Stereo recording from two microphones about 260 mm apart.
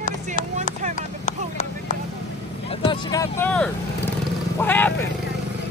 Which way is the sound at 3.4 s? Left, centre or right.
Centre.